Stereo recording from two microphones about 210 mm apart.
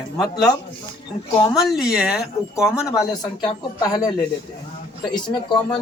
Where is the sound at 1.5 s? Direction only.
Centre (ahead or behind).